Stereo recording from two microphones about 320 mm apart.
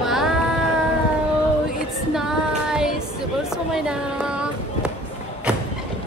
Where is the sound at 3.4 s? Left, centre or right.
Centre.